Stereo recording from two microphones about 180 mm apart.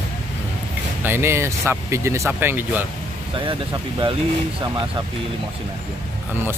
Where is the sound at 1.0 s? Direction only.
10° right (ahead or behind).